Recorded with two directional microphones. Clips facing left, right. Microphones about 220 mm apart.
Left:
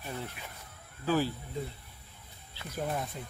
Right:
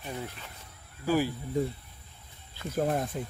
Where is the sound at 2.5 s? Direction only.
45° right (ahead or behind).